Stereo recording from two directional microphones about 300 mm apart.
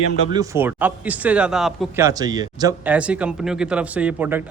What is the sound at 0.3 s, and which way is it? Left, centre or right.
Speech, centre.